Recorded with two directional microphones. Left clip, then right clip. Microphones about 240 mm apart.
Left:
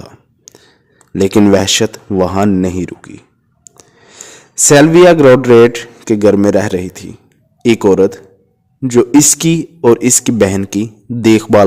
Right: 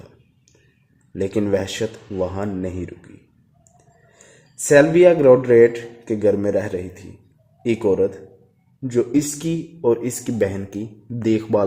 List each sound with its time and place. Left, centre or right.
0.5 s whispering: left
1.1 s speech: left